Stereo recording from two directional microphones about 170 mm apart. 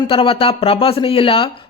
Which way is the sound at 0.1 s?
30° left (ahead or behind).